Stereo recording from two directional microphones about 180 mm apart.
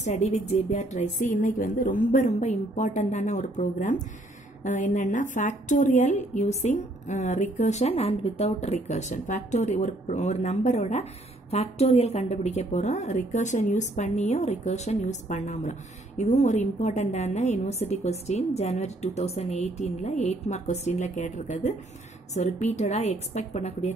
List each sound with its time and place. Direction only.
0.0 s a woman's voice: 40° left (ahead or behind)